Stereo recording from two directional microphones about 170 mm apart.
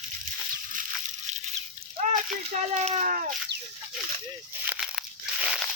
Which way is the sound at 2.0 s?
40° right (ahead or behind).